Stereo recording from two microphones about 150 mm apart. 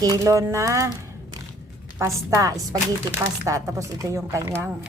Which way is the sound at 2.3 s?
20° right (ahead or behind).